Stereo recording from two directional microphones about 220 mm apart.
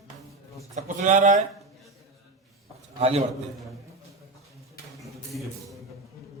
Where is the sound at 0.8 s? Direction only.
35° right (ahead or behind).